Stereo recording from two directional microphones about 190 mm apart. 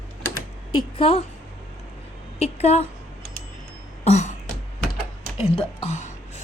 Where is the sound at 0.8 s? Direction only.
30° left (ahead or behind).